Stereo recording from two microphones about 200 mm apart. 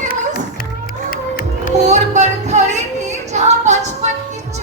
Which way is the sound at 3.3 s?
35° right (ahead or behind).